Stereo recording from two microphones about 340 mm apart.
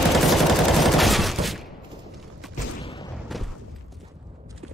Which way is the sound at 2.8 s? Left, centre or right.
Centre.